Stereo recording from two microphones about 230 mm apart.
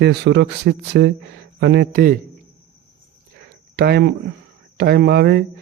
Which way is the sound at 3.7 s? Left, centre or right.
Right.